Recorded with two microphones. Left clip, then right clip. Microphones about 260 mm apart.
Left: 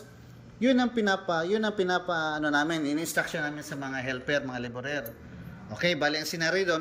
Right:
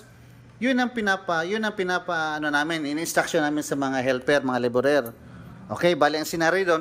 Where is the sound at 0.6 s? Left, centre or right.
Centre.